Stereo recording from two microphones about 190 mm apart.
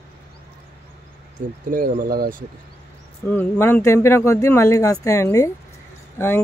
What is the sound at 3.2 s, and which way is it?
Speech, 10° left (ahead or behind).